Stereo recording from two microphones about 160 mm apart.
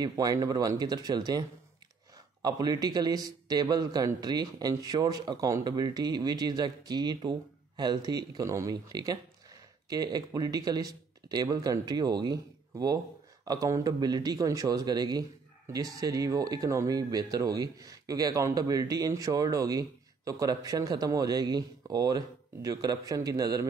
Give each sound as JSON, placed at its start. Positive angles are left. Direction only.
{"t": 0.0, "sound": "a man's voice", "side_deg": -25}
{"t": 2.4, "sound": "a man's voice", "side_deg": -25}